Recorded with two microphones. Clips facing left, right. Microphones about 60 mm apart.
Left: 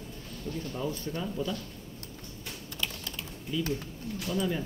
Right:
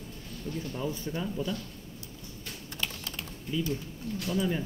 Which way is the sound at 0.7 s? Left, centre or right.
Centre.